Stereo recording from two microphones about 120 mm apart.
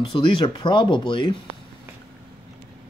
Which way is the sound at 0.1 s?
40° left (ahead or behind).